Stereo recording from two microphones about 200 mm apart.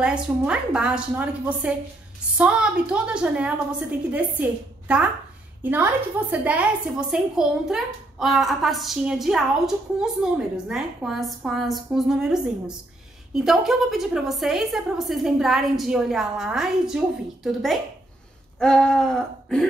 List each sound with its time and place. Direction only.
0.0 s a woman's voice: 5° right (ahead or behind)